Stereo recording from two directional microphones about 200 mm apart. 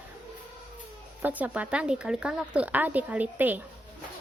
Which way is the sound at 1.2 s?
10° right (ahead or behind).